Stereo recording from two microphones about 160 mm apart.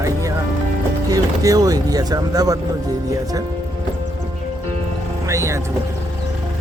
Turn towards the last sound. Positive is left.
turn(degrees=-20)  # may be behind; listen again after turning